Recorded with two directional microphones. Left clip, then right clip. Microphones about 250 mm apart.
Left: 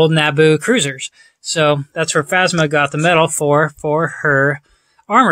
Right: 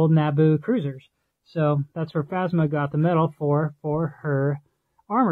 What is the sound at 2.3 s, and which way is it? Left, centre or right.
Speech, centre.